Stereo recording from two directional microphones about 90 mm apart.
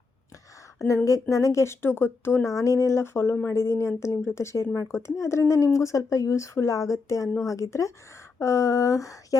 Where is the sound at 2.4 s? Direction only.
35° left (ahead or behind).